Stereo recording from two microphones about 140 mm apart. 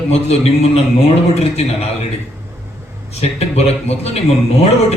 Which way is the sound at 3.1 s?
50° left (ahead or behind).